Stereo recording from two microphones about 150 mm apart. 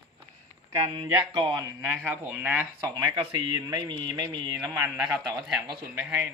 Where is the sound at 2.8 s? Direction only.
25° right (ahead or behind).